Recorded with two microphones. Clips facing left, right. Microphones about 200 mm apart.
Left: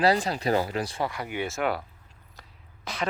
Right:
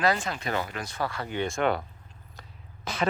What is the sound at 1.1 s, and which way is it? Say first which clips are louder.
Speech: right 1 dB; 15° left (ahead or behind).